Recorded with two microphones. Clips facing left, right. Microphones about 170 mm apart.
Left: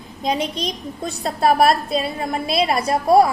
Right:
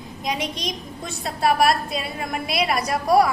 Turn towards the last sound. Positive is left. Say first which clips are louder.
# left 3 dB
turn(degrees=25)  # may be behind; listen again after turning